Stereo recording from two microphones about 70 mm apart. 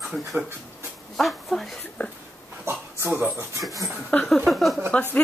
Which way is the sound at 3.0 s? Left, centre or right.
Right.